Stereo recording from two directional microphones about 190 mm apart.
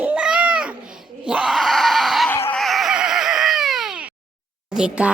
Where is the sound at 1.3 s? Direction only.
5° right (ahead or behind).